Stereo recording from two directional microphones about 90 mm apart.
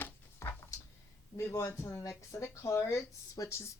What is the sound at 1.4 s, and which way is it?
Speech, 30° left (ahead or behind).